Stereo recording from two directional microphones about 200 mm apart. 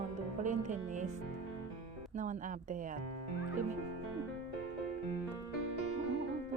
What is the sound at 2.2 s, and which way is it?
Speech, 40° right (ahead or behind).